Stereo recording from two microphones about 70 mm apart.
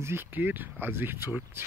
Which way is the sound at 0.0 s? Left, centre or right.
Right.